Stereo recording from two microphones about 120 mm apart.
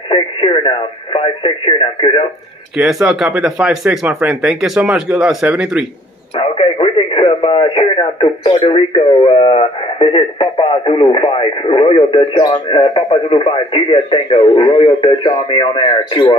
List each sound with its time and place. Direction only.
0.1 s speech: 45° left (ahead or behind)
2.8 s speech: 5° right (ahead or behind)
6.3 s speech: 40° left (ahead or behind)
12.4 s speech: 35° left (ahead or behind)
13.3 s speech: 50° left (ahead or behind)
14.5 s speech: 40° left (ahead or behind)